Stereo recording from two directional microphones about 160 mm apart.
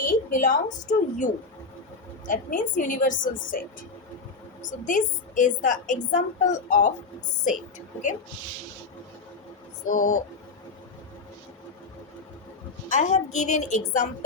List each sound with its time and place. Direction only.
0.1 s a woman's voice: 55° left (ahead or behind)
4.9 s a woman's voice: 50° left (ahead or behind)
9.8 s a woman's voice: 55° left (ahead or behind)
12.9 s a woman's voice: 45° left (ahead or behind)